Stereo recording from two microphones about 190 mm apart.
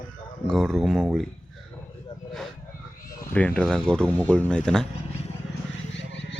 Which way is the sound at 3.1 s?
10° left (ahead or behind).